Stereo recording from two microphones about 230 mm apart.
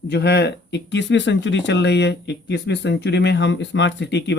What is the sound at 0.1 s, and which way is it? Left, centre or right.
Speech, left.